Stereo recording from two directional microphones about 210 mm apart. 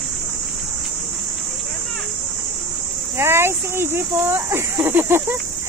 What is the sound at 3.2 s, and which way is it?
Speech, 10° right (ahead or behind).